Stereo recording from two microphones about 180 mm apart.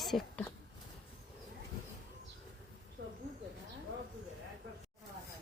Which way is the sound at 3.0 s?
65° right (ahead or behind).